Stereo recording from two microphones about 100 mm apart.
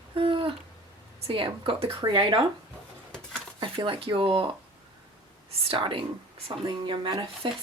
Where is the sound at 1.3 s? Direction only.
60° right (ahead or behind).